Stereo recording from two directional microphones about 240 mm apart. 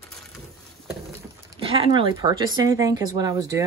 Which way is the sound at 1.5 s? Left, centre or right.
Right.